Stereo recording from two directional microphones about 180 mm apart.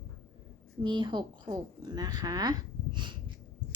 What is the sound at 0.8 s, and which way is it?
A child's voice, 25° right (ahead or behind).